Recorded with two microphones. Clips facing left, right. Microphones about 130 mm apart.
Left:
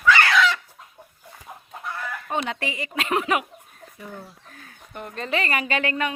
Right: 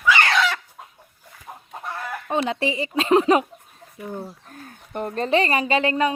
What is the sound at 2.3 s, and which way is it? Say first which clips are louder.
A woman's voice: right 5 dB; 25° right (ahead or behind).